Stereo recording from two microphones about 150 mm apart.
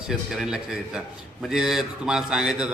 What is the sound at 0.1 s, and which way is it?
A man's voice, 5° right (ahead or behind).